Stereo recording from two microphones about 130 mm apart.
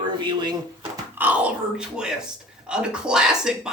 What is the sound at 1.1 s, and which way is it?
Speech, 10° right (ahead or behind).